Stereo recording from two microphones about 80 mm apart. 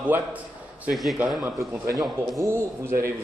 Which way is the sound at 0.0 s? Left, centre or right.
Centre.